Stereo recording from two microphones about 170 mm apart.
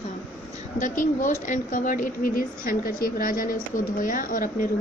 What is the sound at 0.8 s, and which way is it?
Speech, 50° left (ahead or behind).